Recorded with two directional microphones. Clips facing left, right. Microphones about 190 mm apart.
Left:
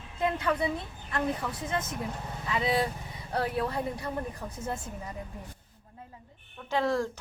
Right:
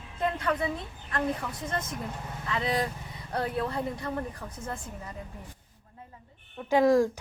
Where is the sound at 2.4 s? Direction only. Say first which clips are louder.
Left 1 dB; 10° left (ahead or behind).